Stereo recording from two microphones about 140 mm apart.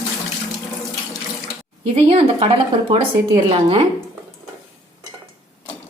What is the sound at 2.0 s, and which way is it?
A woman's voice, 40° right (ahead or behind).